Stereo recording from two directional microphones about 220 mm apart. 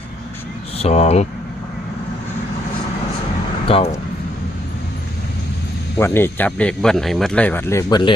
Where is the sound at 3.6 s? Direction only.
25° left (ahead or behind).